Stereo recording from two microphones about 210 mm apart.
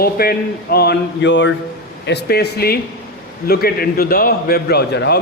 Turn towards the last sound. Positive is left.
turn(degrees=55)  # may be behind; listen again after turning